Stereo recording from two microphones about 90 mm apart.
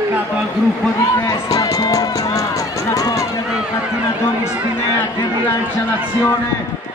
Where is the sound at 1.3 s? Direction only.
45° left (ahead or behind).